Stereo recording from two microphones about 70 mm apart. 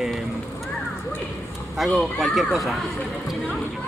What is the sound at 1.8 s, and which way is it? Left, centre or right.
Speech, centre.